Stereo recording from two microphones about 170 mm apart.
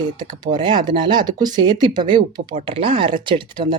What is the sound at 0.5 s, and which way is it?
Speech, 25° right (ahead or behind).